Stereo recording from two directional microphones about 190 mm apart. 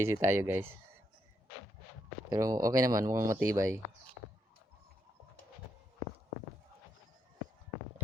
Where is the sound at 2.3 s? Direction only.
20° right (ahead or behind).